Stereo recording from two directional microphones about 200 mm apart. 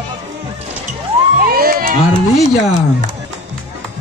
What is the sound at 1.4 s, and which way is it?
Crowd, 45° right (ahead or behind).